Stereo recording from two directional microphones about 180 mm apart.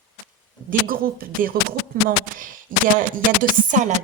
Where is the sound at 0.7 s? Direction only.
55° right (ahead or behind).